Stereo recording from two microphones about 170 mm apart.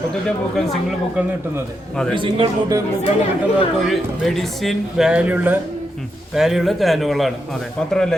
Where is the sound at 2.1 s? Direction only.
30° right (ahead or behind).